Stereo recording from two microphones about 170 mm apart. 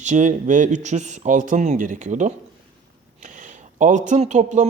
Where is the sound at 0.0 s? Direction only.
45° right (ahead or behind).